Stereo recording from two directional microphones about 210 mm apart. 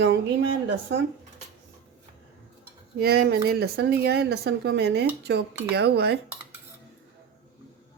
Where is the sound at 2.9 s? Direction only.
50° right (ahead or behind).